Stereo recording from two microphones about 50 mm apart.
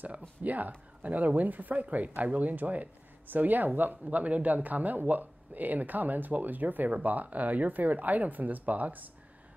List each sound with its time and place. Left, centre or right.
0.4 s speech: right
4.0 s speech: right